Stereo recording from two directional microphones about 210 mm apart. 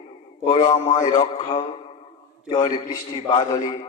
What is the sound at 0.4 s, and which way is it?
A man's voice, 20° left (ahead or behind).